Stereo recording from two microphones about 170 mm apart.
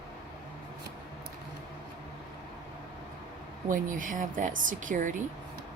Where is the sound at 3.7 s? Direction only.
50° right (ahead or behind).